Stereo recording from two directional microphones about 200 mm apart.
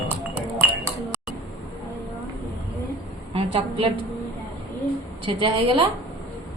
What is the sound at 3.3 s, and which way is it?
Speech, 25° right (ahead or behind).